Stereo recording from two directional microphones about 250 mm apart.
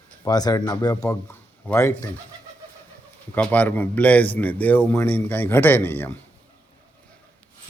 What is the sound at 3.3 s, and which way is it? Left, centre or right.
A man's voice, centre.